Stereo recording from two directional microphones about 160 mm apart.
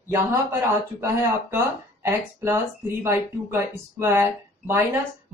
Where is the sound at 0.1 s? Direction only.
15° right (ahead or behind).